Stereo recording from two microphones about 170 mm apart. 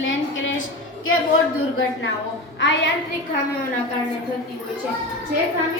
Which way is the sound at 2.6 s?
90° left.